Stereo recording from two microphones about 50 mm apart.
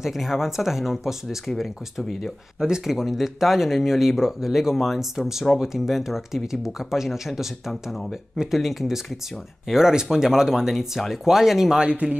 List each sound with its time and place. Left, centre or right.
0.0 s speech: centre
2.0 s speech: centre
2.8 s speech: centre
11.9 s speech: right